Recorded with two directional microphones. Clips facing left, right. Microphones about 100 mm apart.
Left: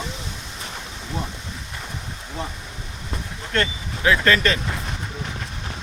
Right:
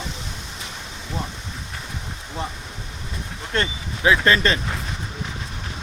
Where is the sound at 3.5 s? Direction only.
20° right (ahead or behind).